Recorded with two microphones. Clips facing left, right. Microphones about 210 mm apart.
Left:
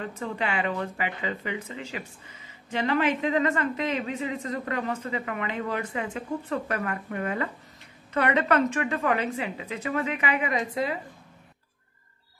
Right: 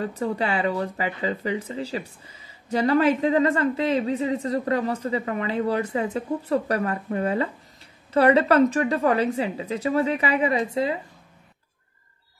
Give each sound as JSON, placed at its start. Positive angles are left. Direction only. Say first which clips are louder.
{"t": 0.0, "sound": "speech", "louder": "right 5 dB", "side_deg": -35}